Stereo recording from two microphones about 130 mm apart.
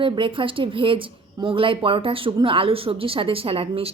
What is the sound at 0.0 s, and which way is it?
A woman's voice, 40° right (ahead or behind).